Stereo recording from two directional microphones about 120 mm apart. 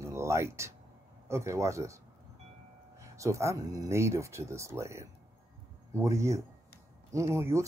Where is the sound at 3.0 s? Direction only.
25° right (ahead or behind).